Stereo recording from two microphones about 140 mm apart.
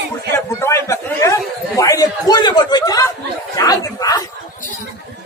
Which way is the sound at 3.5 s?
25° left (ahead or behind).